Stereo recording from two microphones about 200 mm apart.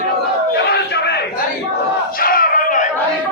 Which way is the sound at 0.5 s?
55° left (ahead or behind).